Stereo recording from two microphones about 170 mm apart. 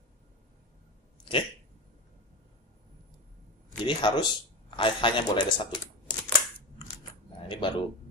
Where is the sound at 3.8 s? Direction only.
25° left (ahead or behind).